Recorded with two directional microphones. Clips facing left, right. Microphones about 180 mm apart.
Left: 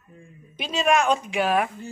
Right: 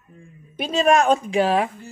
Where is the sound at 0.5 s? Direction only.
50° right (ahead or behind); by 1.7 s 30° right (ahead or behind).